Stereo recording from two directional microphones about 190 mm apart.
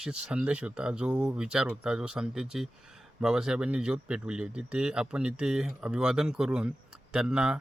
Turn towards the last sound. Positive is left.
turn(degrees=-5)  # may be behind; listen again after turning